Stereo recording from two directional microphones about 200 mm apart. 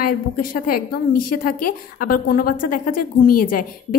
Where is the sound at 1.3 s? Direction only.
45° left (ahead or behind).